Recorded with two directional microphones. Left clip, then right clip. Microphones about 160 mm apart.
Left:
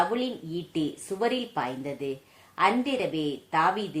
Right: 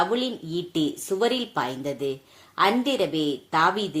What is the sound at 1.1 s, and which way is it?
Speech, 30° right (ahead or behind).